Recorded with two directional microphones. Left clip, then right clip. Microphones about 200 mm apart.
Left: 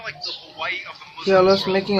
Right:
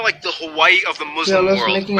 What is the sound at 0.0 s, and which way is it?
A man's voice, 45° right (ahead or behind).